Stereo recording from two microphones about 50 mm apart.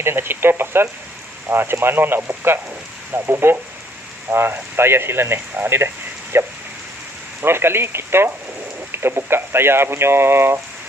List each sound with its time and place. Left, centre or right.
0.0 s speech: right
6.3 s rain on surface: right
7.4 s speech: right